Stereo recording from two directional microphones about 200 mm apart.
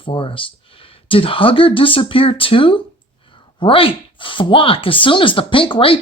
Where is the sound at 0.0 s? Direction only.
25° left (ahead or behind).